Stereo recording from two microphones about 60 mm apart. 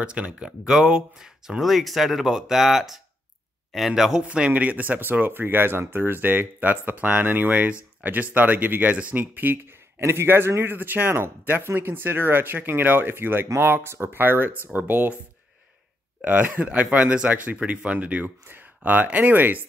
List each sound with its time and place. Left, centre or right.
0.0 s speech: centre
0.5 s speech: centre
4.2 s speech: centre; by 14.2 s right
14.2 s speech: right
16.3 s speech: right